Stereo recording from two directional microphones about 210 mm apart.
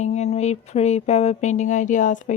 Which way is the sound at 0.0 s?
30° left (ahead or behind).